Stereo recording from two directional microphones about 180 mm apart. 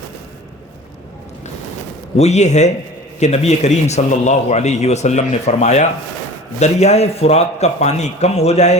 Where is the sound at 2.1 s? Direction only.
40° left (ahead or behind).